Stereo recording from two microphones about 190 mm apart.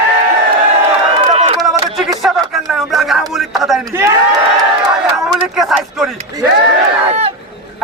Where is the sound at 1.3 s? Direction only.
35° right (ahead or behind).